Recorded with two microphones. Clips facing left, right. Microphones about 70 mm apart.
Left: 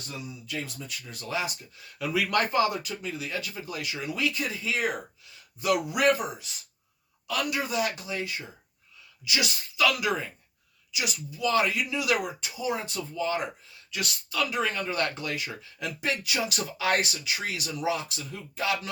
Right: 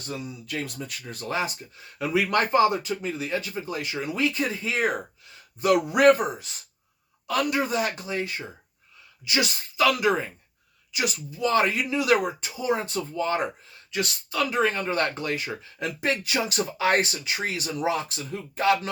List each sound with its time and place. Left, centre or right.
0.2 s speech: right
13.9 s speech: right